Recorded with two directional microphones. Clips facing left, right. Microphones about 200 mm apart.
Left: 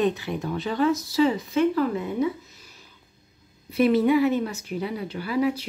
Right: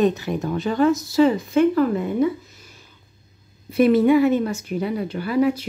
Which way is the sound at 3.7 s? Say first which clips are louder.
Right 4 dB; 50° right (ahead or behind).